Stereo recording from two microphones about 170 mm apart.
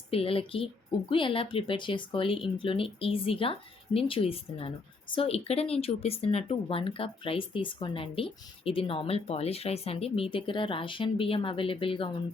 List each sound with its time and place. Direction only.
0.1 s speech: 35° left (ahead or behind)